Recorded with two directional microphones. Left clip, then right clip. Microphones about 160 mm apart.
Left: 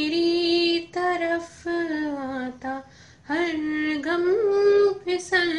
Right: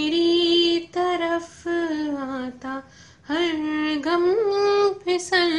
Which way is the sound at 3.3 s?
15° right (ahead or behind).